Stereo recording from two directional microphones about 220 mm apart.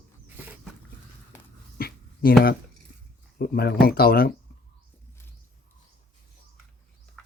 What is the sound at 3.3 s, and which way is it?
Speech, 45° left (ahead or behind).